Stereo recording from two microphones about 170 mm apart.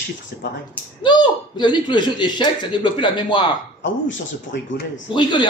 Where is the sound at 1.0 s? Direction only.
25° left (ahead or behind).